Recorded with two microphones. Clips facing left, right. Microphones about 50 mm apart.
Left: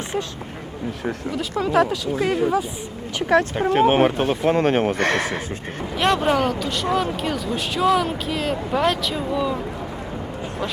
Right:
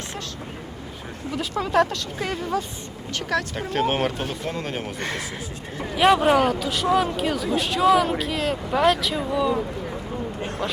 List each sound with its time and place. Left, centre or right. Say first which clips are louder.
1.4 s speech: left 1 dB; centre
3.2 s speech: left 9 dB; left
5.0 s speech: left 8 dB; left
6.0 s speech: right 2 dB; centre